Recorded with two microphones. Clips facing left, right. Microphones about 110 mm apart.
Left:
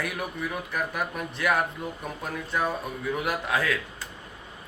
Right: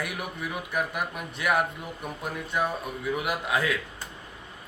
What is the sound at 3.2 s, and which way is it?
Speech, 5° right (ahead or behind).